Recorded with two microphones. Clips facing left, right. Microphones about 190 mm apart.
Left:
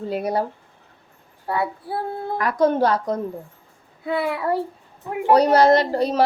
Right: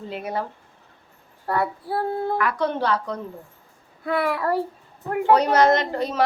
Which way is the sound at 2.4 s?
40° left (ahead or behind).